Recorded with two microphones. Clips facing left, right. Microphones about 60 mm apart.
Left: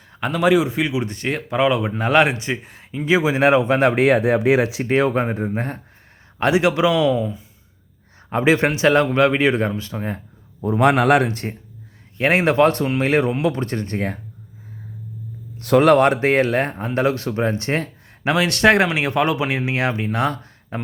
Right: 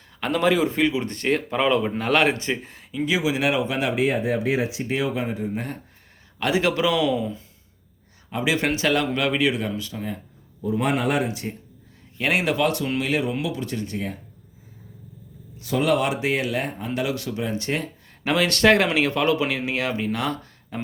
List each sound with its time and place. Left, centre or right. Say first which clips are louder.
0.2 s speech: left 3 dB; centre; by 4.0 s left
4.0 s speech: left 7 dB; left
4.9 s a man's voice: left 7 dB; left
6.4 s speech: left 5 dB; left
8.3 s a man's voice: left 7 dB; left
8.6 s a man's voice: left 6 dB; left
10.6 s speech: left 7 dB; left
12.1 s a man's voice: left 6 dB; left
15.5 s a man's voice: left 8 dB; left
18.3 s speech: left 2 dB; left